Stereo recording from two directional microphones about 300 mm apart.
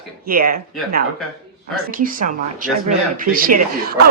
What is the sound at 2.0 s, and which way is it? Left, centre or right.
Speech, right.